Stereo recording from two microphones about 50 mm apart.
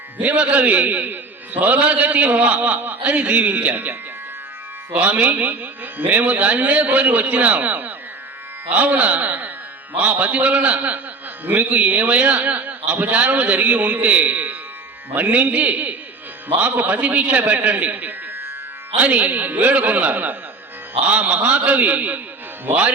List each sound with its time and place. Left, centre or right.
0.2 s a man's voice: right
18.9 s a man's voice: right